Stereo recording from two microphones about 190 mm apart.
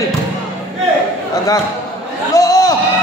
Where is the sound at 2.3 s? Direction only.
15° left (ahead or behind).